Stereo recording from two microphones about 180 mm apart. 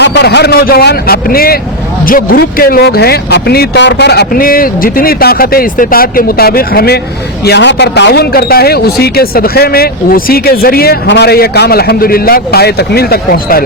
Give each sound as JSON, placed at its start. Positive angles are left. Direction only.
{"t": 0.0, "sound": "speech", "side_deg": 70}
{"t": 7.4, "sound": "speech", "side_deg": 70}